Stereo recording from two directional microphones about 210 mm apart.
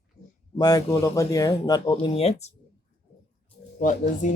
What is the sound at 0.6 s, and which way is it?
Speech, 20° left (ahead or behind).